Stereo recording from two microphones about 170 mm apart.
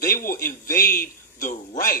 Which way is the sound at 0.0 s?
60° left (ahead or behind).